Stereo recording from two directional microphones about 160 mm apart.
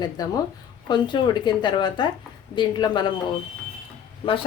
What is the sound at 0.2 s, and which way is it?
Speech, 25° left (ahead or behind).